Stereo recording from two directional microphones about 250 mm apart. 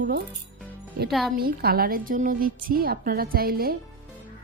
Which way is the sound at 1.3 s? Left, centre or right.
Right.